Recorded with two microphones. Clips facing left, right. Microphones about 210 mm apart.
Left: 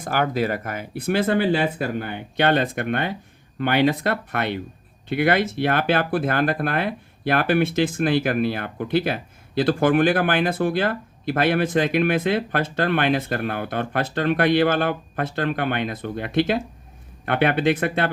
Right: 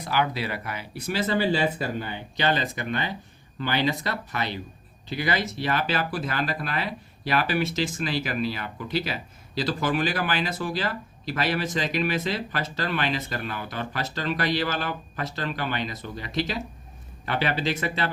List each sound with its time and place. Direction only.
0.0 s speech: 50° left (ahead or behind)